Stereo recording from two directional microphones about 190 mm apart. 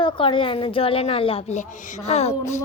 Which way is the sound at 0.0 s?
25° left (ahead or behind).